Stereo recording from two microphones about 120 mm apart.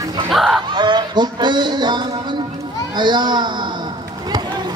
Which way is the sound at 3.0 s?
40° right (ahead or behind).